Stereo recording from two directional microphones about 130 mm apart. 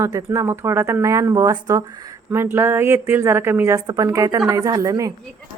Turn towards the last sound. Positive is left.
turn(degrees=-25)  # may be behind; listen again after turning